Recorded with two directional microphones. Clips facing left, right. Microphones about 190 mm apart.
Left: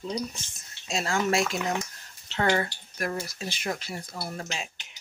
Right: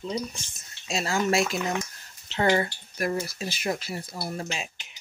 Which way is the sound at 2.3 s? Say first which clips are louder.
Right 2 dB; 15° right (ahead or behind).